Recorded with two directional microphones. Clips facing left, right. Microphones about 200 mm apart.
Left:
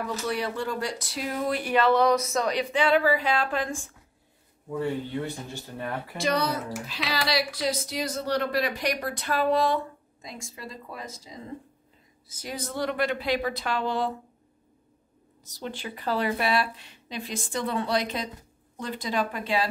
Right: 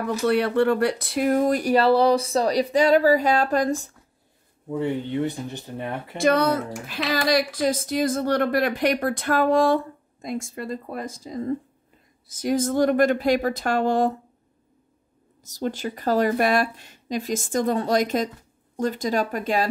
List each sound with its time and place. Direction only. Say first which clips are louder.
0.3 s speech: right 12 dB; 60° right (ahead or behind); by 3.9 s 40° right (ahead or behind)
4.6 s speech: right 4 dB; 20° right (ahead or behind)
6.1 s a woman's voice: right 7 dB; 50° right (ahead or behind)
15.4 s a woman's voice: right 8 dB; 45° right (ahead or behind)